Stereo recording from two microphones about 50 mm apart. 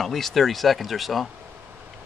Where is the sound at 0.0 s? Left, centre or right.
Centre.